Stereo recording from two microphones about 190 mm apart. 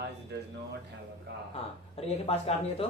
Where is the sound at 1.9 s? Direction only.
35° left (ahead or behind).